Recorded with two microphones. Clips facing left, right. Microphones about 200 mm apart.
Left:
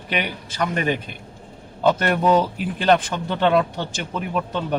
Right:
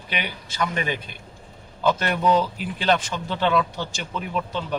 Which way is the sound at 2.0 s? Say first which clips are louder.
Left 2 dB; 50° left (ahead or behind).